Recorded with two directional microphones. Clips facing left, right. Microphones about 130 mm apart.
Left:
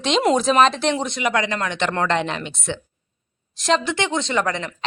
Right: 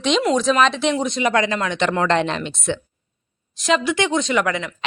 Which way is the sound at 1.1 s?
25° right (ahead or behind).